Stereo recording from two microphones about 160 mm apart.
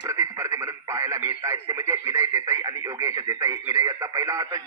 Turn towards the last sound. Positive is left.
turn(degrees=-20)  # may be behind; listen again after turning